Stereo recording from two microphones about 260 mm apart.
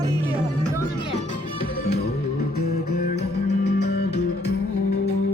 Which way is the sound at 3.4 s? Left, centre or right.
Left.